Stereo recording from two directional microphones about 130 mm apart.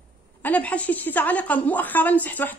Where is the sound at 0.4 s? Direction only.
10° left (ahead or behind).